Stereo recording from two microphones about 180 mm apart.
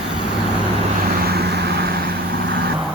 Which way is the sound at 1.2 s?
60° right (ahead or behind).